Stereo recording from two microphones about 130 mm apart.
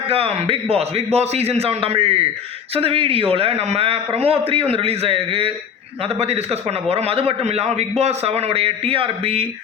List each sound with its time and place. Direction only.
0.1 s a man's voice: 50° right (ahead or behind)